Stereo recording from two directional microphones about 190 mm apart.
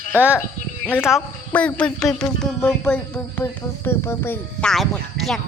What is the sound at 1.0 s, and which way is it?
Speech, centre (ahead or behind).